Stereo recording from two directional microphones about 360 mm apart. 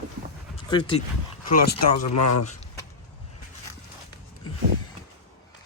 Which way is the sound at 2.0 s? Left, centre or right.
Left.